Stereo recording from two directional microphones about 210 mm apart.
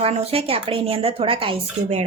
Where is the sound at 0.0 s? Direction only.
30° right (ahead or behind).